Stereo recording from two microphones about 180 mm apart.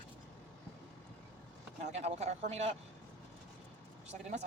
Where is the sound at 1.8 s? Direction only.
40° right (ahead or behind).